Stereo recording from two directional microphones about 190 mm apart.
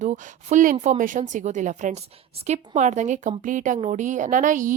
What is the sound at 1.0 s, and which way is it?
A woman's voice, 45° right (ahead or behind).